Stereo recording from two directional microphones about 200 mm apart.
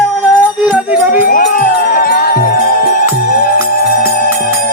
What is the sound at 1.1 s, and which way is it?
Speech, 45° left (ahead or behind).